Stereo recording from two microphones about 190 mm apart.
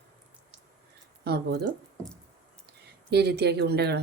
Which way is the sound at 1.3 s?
55° right (ahead or behind).